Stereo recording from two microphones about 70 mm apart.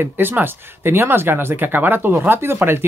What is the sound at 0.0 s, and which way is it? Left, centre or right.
Speech, right.